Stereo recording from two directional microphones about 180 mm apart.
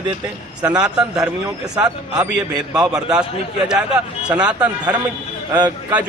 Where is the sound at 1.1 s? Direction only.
20° right (ahead or behind).